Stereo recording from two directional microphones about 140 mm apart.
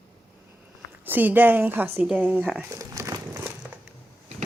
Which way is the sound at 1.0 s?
15° right (ahead or behind).